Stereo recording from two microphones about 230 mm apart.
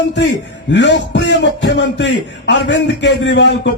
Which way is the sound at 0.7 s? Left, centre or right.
Left.